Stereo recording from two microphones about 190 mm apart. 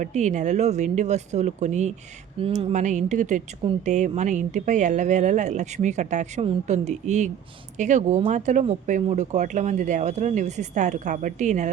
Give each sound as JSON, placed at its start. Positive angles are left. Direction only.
{"t": 0.0, "sound": "speech", "side_deg": -40}